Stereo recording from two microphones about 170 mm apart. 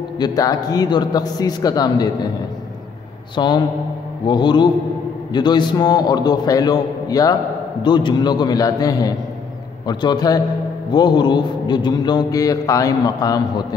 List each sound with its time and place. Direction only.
0.2 s speech: 20° left (ahead or behind)
3.3 s speech: 25° left (ahead or behind)